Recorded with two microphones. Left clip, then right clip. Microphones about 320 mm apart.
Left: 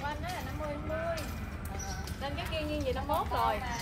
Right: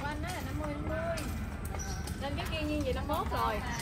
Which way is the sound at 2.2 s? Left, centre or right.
Left.